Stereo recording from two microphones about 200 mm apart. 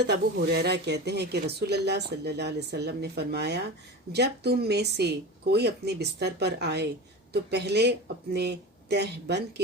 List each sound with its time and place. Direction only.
0.0 s speech: 55° right (ahead or behind)